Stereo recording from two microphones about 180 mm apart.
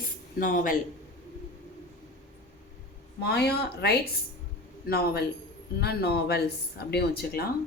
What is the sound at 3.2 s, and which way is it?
Speech, 65° left (ahead or behind).